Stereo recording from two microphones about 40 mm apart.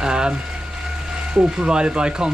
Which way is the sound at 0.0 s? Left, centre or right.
Centre.